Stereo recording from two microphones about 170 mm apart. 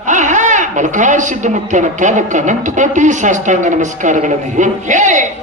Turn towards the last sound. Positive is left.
turn(degrees=-45)  # may be behind; listen again after turning